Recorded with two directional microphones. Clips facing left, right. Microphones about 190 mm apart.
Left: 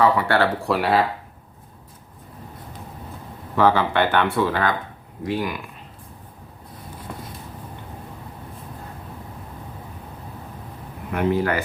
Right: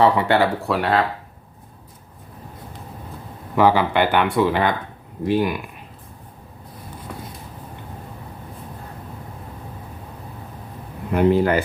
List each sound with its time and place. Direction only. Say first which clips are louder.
0.0 s speech: right 2 dB; 20° right (ahead or behind)
0.6 s speech: even; centre (ahead or behind)
3.5 s speech: right 2 dB; 10° right (ahead or behind)
11.1 s speech: right 5 dB; 30° right (ahead or behind)